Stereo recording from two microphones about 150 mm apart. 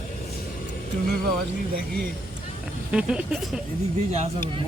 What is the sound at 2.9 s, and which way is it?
Speech, 5° right (ahead or behind).